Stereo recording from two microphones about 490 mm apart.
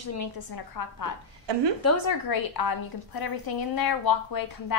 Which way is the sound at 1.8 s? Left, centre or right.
Left.